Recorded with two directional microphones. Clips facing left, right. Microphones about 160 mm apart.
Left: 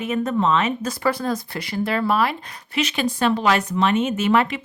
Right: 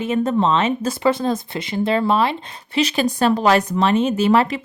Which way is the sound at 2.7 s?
35° right (ahead or behind).